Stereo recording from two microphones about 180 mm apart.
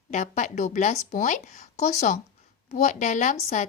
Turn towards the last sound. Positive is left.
turn(degrees=40)  # may be behind; listen again after turning